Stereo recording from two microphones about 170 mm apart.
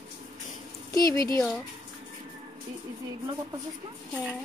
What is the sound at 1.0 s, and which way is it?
Speech, 20° left (ahead or behind).